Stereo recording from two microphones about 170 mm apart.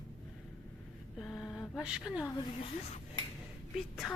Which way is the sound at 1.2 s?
5° left (ahead or behind).